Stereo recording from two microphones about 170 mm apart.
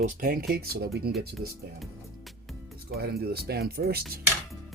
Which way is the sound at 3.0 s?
65° right (ahead or behind).